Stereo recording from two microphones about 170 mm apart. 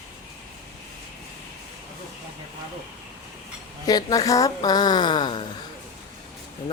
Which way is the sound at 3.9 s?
20° left (ahead or behind).